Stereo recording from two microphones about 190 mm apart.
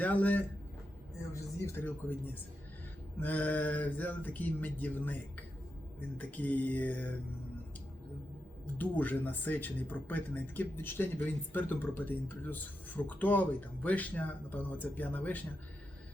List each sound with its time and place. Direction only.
0.0 s speech: 10° left (ahead or behind)
8.8 s speech: 10° left (ahead or behind)